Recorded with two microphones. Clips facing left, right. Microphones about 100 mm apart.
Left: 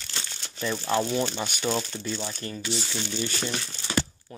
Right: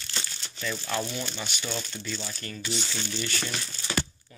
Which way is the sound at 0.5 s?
30° left (ahead or behind).